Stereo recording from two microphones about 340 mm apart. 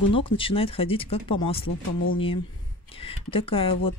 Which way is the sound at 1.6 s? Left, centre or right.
Left.